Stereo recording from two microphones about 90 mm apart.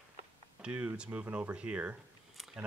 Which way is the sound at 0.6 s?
15° right (ahead or behind).